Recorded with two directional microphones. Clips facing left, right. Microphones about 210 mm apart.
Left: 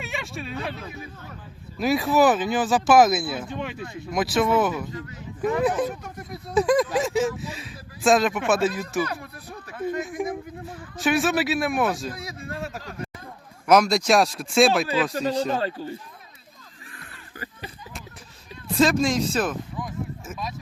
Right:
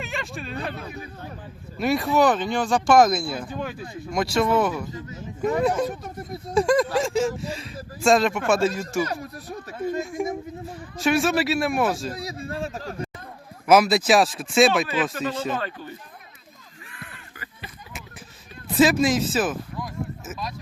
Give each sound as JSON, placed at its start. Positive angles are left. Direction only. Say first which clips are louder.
{"t": 0.0, "sound": "a sound", "louder": "right 1 dB", "side_deg": 0}
{"t": 1.8, "sound": "speech", "louder": "left 1 dB", "side_deg": 0}
{"t": 5.9, "sound": "speech", "louder": "right 2 dB", "side_deg": -35}
{"t": 6.5, "sound": "speech", "louder": "even", "side_deg": 0}
{"t": 9.0, "sound": "speech", "louder": "right 3 dB", "side_deg": -40}
{"t": 10.0, "sound": "speech", "louder": "right 1 dB", "side_deg": 0}
{"t": 12.1, "sound": "speech", "louder": "right 3 dB", "side_deg": -30}
{"t": 13.7, "sound": "speech", "louder": "right 1 dB", "side_deg": -5}
{"t": 15.1, "sound": "speech", "louder": "left 3 dB", "side_deg": 40}
{"t": 18.8, "sound": "speech", "louder": "right 2 dB", "side_deg": -5}